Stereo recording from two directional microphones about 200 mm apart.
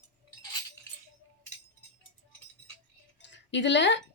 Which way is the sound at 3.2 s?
65° left (ahead or behind).